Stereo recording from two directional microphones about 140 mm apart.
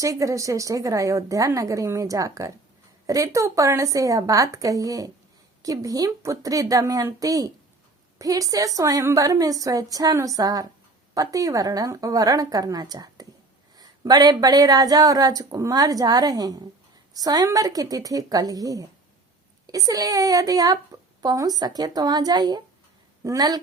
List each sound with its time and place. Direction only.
0.0 s a woman's voice: 20° right (ahead or behind)